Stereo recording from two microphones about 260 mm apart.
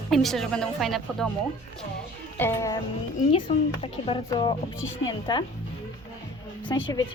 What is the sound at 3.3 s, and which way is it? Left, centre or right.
A woman's voice, left.